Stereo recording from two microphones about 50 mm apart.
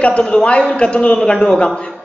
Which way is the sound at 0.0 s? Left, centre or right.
Left.